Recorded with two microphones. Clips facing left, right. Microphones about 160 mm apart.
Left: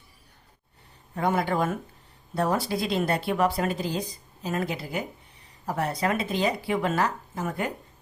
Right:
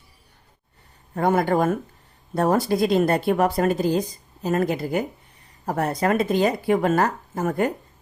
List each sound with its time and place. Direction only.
1.1 s speech: 45° right (ahead or behind)